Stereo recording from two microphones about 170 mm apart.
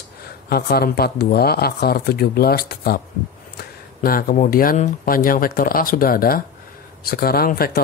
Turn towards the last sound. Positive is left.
turn(degrees=60)  # may be behind; listen again after turning